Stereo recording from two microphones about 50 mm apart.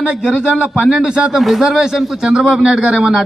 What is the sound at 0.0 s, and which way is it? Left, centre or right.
A man's voice, centre.